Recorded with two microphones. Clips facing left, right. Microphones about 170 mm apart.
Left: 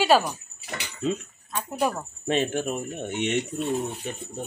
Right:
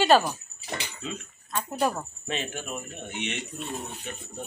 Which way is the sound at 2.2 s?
45° left (ahead or behind).